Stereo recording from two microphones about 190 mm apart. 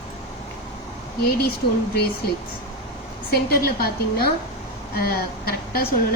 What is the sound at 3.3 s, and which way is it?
A woman's voice, 50° left (ahead or behind).